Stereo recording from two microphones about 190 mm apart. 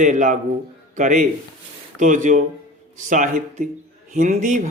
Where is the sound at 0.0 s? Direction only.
40° right (ahead or behind).